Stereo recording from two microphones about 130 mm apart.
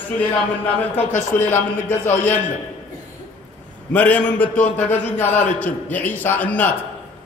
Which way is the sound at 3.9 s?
10° left (ahead or behind).